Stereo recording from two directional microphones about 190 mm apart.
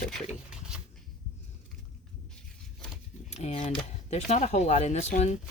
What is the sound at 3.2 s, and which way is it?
Speech, 35° left (ahead or behind).